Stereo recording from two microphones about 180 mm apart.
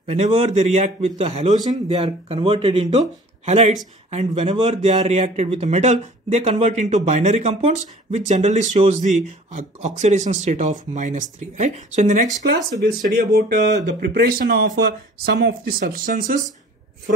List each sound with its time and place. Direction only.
0.0 s speech: 35° right (ahead or behind)
1.6 s speech: 20° right (ahead or behind)
2.0 s speech: 35° right (ahead or behind)
13.2 s speech: 55° right (ahead or behind)